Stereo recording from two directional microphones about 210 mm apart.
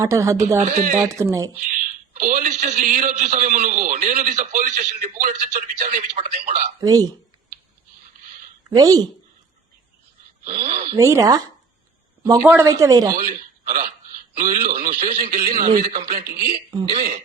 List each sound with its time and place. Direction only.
0.0 s speech: 15° right (ahead or behind)
0.6 s a man's voice: 35° right (ahead or behind)
0.9 s speech: 15° right (ahead or behind)
1.7 s a man's voice: 40° right (ahead or behind)
6.8 s speech: 15° right (ahead or behind)
8.7 s speech: 20° right (ahead or behind)
10.7 s speech: 40° right (ahead or behind)
10.9 s speech: 15° right (ahead or behind)
13.2 s a man's voice: 40° right (ahead or behind)
16.4 s speech: 20° right (ahead or behind)